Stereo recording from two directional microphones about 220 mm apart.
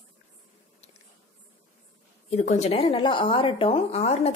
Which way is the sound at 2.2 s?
30° left (ahead or behind).